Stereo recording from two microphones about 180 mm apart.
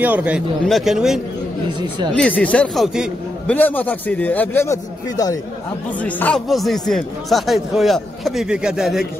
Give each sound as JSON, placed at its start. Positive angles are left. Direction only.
{"t": 0.0, "sound": "speech", "side_deg": -10}
{"t": 1.8, "sound": "speech", "side_deg": -25}
{"t": 2.1, "sound": "speech", "side_deg": 5}
{"t": 3.4, "sound": "a man's voice", "side_deg": 10}